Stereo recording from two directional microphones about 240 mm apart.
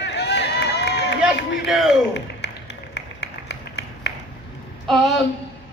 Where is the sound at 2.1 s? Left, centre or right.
Left.